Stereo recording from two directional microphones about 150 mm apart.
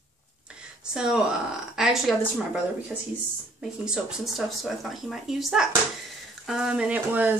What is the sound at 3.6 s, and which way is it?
Speech, 5° right (ahead or behind).